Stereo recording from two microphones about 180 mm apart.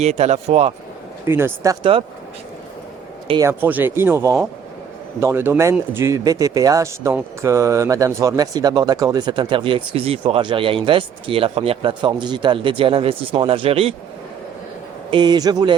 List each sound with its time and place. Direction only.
0.0 s speech: 35° right (ahead or behind)
1.3 s speech: 10° right (ahead or behind)
1.8 s speech: 30° right (ahead or behind)
3.4 s speech: 10° right (ahead or behind); by 13.9 s 30° right (ahead or behind)
15.1 s speech: 25° right (ahead or behind)